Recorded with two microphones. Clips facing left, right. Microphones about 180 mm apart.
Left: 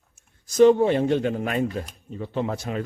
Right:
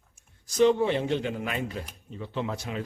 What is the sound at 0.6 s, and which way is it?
Speech, 45° left (ahead or behind).